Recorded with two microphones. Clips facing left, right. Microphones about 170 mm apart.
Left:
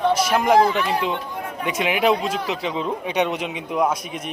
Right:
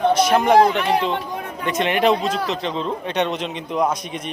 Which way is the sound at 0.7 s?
70° right (ahead or behind).